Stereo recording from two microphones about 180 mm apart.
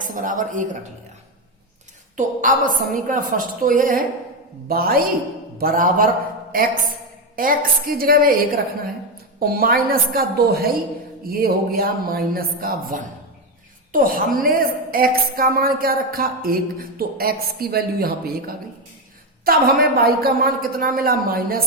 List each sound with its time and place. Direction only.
0.0 s a woman's voice: 45° right (ahead or behind)
2.1 s a woman's voice: 45° right (ahead or behind)